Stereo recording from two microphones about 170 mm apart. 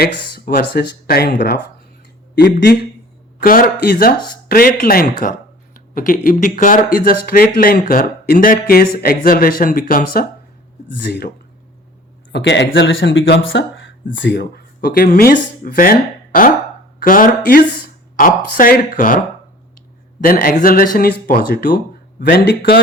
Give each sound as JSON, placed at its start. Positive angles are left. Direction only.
{"t": 0.0, "sound": "speech", "side_deg": 60}
{"t": 2.3, "sound": "a man's voice", "side_deg": 75}
{"t": 3.4, "sound": "speech", "side_deg": 55}
{"t": 12.3, "sound": "speech", "side_deg": 90}
{"t": 20.2, "sound": "speech", "side_deg": 60}
{"t": 22.2, "sound": "a man's voice", "side_deg": 75}